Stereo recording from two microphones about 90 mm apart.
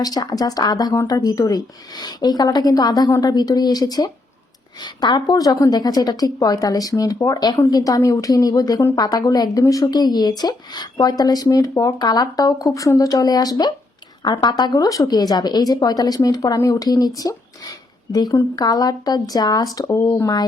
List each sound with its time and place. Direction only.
0.0 s a woman's voice: 45° left (ahead or behind)
19.9 s speech: 30° left (ahead or behind)